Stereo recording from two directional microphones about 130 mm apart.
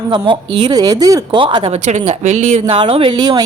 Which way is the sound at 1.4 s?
40° right (ahead or behind).